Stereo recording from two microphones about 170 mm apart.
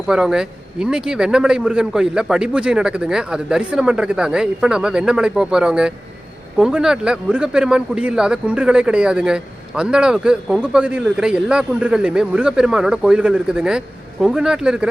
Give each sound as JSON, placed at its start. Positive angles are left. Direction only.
{"t": 0.1, "sound": "speech", "side_deg": -5}